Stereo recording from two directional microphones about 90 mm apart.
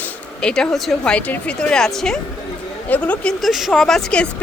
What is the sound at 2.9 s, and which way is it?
Speech, 15° left (ahead or behind).